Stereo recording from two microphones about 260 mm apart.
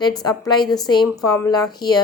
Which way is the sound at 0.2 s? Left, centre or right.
Centre.